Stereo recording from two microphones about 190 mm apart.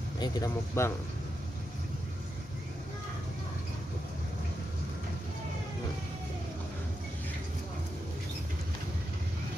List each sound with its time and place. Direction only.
0.2 s speech: 15° left (ahead or behind)